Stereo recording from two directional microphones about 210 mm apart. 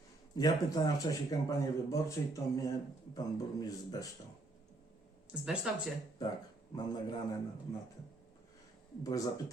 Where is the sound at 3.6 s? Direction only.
15° left (ahead or behind).